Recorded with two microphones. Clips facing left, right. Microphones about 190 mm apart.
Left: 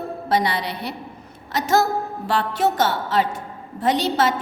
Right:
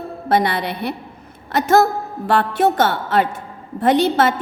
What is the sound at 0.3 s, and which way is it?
A woman's voice, 55° right (ahead or behind).